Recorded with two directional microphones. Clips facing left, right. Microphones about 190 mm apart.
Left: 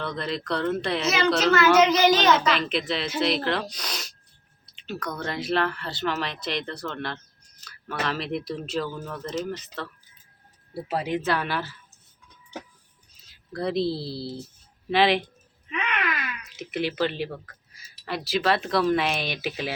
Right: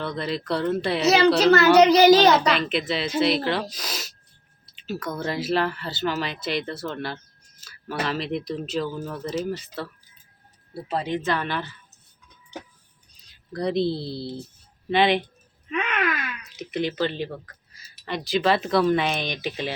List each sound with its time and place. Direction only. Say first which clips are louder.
0.0 s speech: right 2 dB; centre (ahead or behind)
1.0 s a child's voice: right 6 dB; 35° right (ahead or behind)
2.6 s speech: right 2 dB; centre (ahead or behind)
10.8 s speech: even; 10° left (ahead or behind)
13.2 s speech: right 2 dB; centre (ahead or behind)
16.6 s speech: right 1 dB; 5° left (ahead or behind)